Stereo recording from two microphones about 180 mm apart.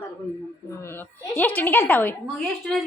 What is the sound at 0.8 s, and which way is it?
A woman's voice, 10° left (ahead or behind).